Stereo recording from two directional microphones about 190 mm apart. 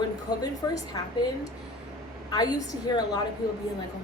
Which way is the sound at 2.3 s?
20° left (ahead or behind).